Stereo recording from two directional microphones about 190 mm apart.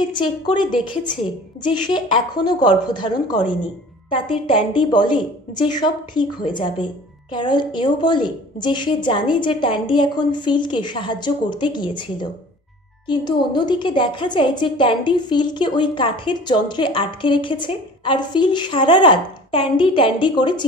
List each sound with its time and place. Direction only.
0.2 s a woman's voice: 25° left (ahead or behind)